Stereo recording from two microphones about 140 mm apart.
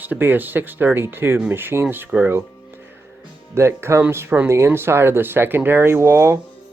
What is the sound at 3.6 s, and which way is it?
Speech, 20° right (ahead or behind).